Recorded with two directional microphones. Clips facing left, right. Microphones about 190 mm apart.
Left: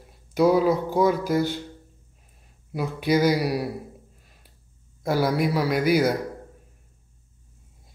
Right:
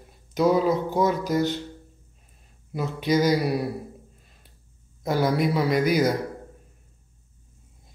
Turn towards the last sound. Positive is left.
turn(degrees=5)  # may be behind; listen again after turning